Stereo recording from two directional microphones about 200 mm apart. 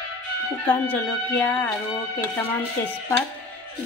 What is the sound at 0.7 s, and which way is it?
Speech, 10° left (ahead or behind).